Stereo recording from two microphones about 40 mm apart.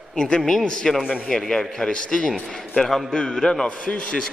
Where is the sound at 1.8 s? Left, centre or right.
Left.